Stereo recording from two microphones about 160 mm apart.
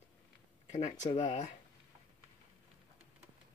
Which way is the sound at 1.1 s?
30° left (ahead or behind).